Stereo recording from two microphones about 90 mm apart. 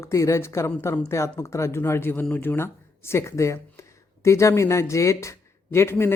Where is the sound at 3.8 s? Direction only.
35° left (ahead or behind).